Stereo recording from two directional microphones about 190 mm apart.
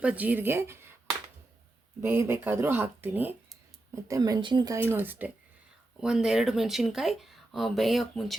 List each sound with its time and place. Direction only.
0.0 s speech: 10° right (ahead or behind)
2.0 s speech: 10° right (ahead or behind)
4.1 s speech: 20° right (ahead or behind); by 8.4 s centre (ahead or behind)